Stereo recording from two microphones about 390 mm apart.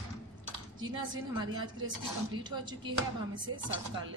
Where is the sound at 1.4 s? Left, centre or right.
Centre.